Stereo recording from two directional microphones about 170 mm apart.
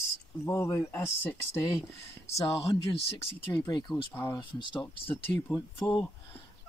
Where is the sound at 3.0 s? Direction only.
35° left (ahead or behind).